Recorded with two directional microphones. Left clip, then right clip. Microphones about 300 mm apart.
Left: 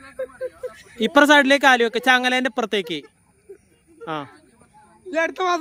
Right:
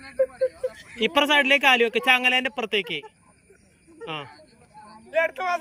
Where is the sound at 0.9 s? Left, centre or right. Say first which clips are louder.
Left 6 dB; centre.